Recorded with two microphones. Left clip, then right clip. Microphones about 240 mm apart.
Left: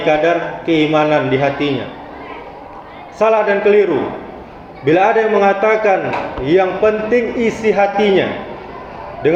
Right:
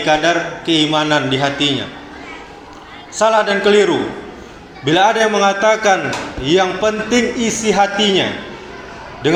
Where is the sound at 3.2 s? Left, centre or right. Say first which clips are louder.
Left 1 dB; right.